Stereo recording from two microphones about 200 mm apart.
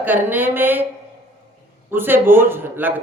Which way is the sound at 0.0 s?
10° right (ahead or behind).